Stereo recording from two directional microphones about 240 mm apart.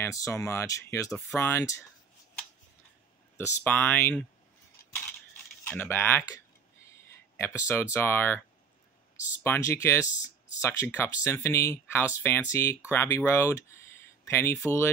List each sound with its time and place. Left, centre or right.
0.0 s speech: centre
3.3 s speech: centre
5.6 s speech: centre
9.4 s speech: centre